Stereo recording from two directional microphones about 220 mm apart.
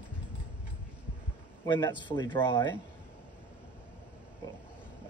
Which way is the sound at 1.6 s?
20° left (ahead or behind).